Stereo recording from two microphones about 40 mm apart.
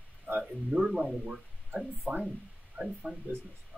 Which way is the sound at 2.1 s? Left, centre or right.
Right.